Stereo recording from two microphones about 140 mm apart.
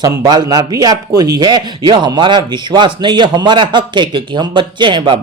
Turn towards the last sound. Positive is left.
turn(degrees=-35)  # may be behind; listen again after turning